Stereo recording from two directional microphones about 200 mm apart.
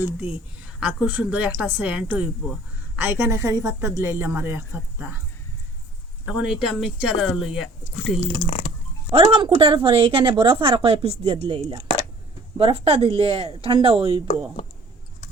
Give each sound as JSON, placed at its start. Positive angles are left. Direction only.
{"t": 0.8, "sound": "speech", "side_deg": -5}
{"t": 6.2, "sound": "speech", "side_deg": -5}
{"t": 8.4, "sound": "speech", "side_deg": 30}
{"t": 9.1, "sound": "a woman's voice", "side_deg": -25}